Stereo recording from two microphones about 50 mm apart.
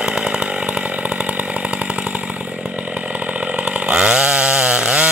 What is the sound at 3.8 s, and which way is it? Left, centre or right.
Chainsaw, right.